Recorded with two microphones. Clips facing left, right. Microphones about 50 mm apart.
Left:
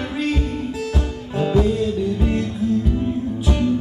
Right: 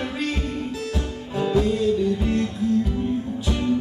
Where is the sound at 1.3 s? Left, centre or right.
Centre.